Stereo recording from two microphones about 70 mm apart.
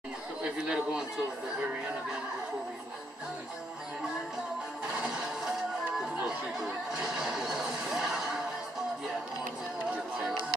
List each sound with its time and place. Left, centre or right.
0.4 s chatter: centre
4.9 s music: centre
6.9 s a sound: centre